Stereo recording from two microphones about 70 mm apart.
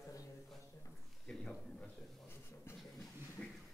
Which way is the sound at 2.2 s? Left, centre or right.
Left.